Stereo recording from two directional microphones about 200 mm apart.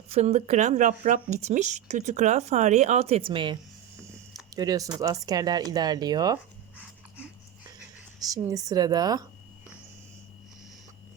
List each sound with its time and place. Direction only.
0.1 s speech: 30° right (ahead or behind)
8.2 s a woman's voice: 20° right (ahead or behind)